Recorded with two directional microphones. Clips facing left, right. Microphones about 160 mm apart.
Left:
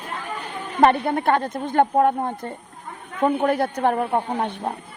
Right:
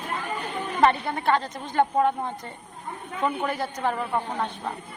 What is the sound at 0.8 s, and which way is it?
A woman's voice, 55° left (ahead or behind).